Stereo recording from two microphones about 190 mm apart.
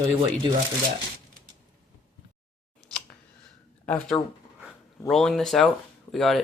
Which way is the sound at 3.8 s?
10° left (ahead or behind).